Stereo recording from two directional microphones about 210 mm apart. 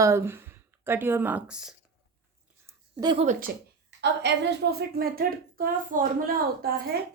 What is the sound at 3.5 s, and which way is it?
A woman's voice, 45° right (ahead or behind).